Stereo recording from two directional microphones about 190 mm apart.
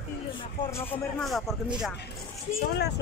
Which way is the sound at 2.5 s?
60° left (ahead or behind).